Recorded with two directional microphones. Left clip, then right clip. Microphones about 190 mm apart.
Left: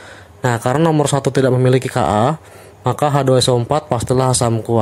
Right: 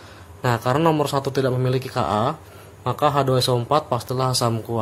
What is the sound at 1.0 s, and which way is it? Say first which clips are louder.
Speech: left 6 dB; 40° left (ahead or behind).